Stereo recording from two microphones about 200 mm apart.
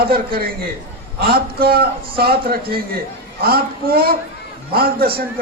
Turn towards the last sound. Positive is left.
turn(degrees=-50)  # may be behind; listen again after turning